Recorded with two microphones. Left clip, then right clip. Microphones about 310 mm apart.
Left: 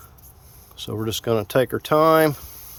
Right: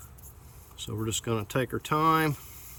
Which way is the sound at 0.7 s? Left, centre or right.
Centre.